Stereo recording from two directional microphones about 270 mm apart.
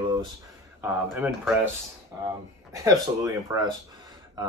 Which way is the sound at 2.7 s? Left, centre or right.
Centre.